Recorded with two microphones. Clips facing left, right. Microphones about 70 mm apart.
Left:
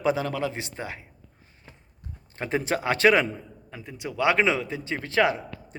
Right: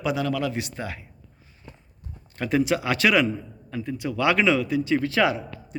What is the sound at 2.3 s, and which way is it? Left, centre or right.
Speech, left.